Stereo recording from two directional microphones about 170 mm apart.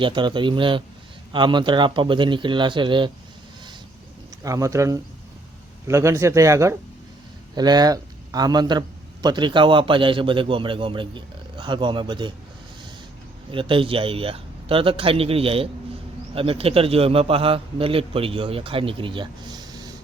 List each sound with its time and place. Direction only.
0.0 s a man's voice: 30° right (ahead or behind)
4.4 s a man's voice: 20° right (ahead or behind)
13.5 s a man's voice: 30° right (ahead or behind)